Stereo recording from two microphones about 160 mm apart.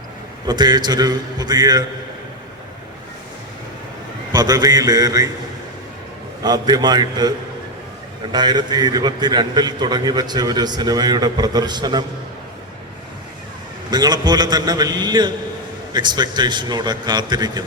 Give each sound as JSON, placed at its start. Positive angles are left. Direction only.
{"t": 0.4, "sound": "a man's voice", "side_deg": -25}
{"t": 4.3, "sound": "a man's voice", "side_deg": -25}
{"t": 6.4, "sound": "a man's voice", "side_deg": -25}
{"t": 13.9, "sound": "a man's voice", "side_deg": -25}